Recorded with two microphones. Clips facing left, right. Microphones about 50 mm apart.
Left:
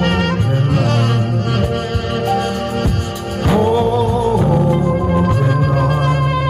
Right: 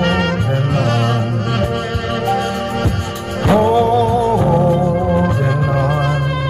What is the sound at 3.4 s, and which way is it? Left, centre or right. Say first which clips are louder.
Music: right 2 dB; right.